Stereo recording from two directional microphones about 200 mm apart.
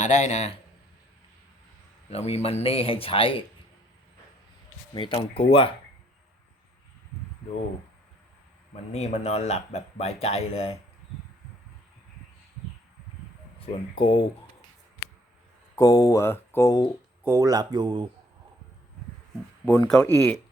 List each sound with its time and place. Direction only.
0.0 s speech: 35° left (ahead or behind)
2.0 s speech: 30° left (ahead or behind)
4.9 s speech: 25° left (ahead or behind)
8.7 s speech: 35° left (ahead or behind)
13.9 s speech: 25° left (ahead or behind)
15.7 s speech: 15° left (ahead or behind)
17.2 s speech: 15° right (ahead or behind)
19.6 s speech: 10° left (ahead or behind)